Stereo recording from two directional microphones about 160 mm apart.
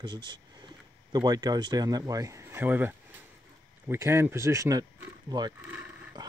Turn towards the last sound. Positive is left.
turn(degrees=-15)  # may be behind; listen again after turning